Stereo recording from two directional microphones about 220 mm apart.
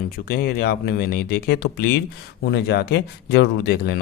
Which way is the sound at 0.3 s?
45° left (ahead or behind).